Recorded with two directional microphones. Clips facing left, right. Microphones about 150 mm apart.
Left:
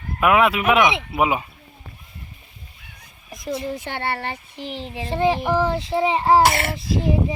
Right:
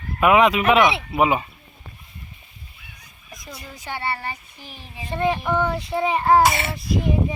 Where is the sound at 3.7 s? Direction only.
60° left (ahead or behind); by 5.0 s 80° left.